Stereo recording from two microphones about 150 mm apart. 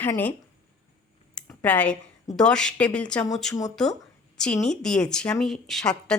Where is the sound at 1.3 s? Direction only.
5° left (ahead or behind).